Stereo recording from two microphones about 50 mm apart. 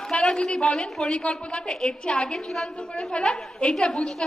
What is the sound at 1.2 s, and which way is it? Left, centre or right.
A woman's voice, left.